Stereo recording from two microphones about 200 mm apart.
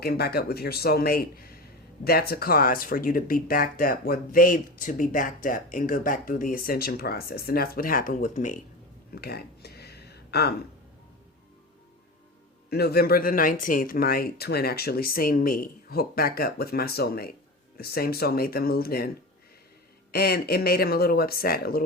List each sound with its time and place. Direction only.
0.0 s speech: 50° left (ahead or behind)
9.2 s a sound: 50° left (ahead or behind)
12.7 s speech: 50° left (ahead or behind)